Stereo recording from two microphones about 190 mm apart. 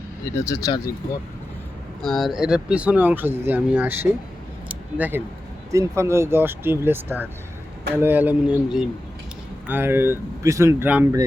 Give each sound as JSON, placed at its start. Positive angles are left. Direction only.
{"t": 0.4, "sound": "speech", "side_deg": 15}
{"t": 2.0, "sound": "speech", "side_deg": 0}